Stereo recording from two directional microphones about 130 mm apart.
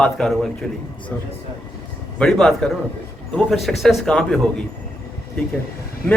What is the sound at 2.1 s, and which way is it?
A man's voice, 5° left (ahead or behind).